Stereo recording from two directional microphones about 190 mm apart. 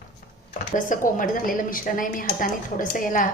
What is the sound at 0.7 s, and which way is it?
A woman's voice, 45° left (ahead or behind).